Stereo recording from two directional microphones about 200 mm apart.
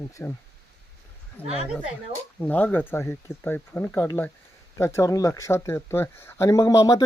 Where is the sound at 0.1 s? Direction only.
15° left (ahead or behind).